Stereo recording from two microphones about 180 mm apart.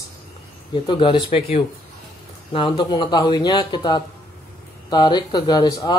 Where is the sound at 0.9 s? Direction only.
25° left (ahead or behind).